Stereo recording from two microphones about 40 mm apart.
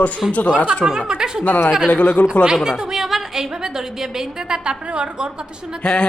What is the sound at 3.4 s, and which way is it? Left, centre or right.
A woman's voice, centre.